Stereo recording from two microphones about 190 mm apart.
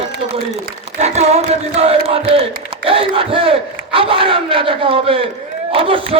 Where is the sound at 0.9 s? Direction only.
35° right (ahead or behind).